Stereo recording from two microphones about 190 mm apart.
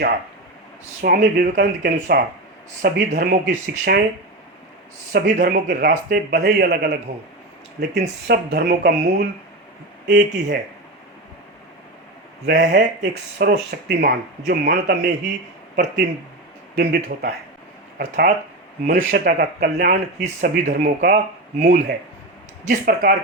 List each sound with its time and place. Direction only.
1.0 s speech: 50° right (ahead or behind)
5.1 s speech: 50° right (ahead or behind)
12.5 s speech: 65° right (ahead or behind)